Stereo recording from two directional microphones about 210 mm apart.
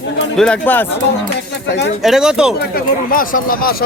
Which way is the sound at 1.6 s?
55° left (ahead or behind).